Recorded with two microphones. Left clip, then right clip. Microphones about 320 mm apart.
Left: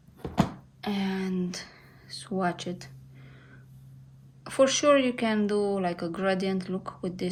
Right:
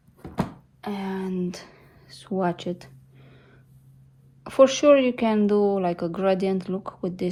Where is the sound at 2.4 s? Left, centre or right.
Centre.